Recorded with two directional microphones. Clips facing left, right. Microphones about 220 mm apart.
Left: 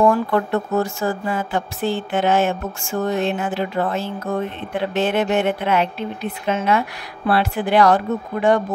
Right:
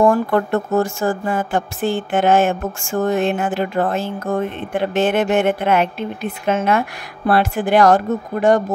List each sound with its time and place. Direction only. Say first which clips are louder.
0.0 s speech: right 2 dB; 45° right (ahead or behind)